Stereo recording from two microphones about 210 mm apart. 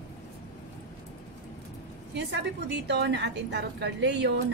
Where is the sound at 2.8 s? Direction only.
55° right (ahead or behind).